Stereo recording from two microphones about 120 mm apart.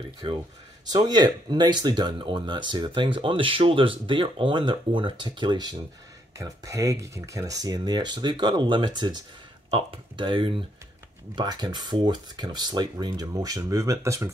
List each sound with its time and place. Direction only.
0.9 s speech: 35° right (ahead or behind)
9.7 s speech: 50° right (ahead or behind)
11.3 s speech: 35° right (ahead or behind)